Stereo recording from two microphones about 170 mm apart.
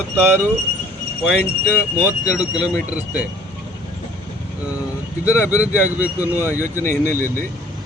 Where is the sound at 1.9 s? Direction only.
10° right (ahead or behind).